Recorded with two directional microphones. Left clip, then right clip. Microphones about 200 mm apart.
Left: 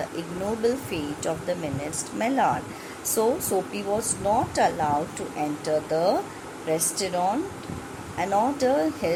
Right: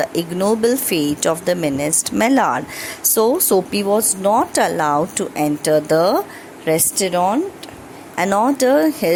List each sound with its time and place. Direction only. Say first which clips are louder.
0.2 s speech: right 9 dB; 45° right (ahead or behind)